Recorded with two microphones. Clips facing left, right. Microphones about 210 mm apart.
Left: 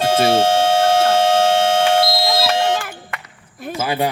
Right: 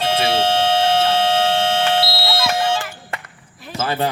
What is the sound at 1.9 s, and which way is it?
Smoke detector, 50° left (ahead or behind).